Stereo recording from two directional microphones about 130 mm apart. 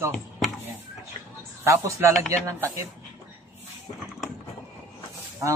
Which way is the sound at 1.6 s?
20° right (ahead or behind).